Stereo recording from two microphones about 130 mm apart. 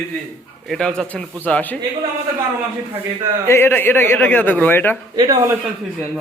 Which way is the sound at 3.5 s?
20° left (ahead or behind).